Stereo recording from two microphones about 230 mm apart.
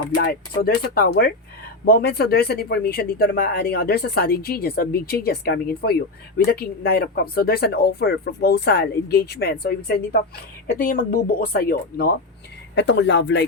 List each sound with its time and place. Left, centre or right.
0.1 s speech: left
12.7 s speech: left